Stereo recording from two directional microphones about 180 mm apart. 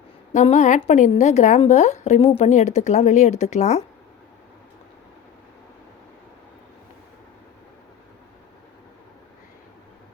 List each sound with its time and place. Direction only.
0.3 s a woman's voice: 40° left (ahead or behind)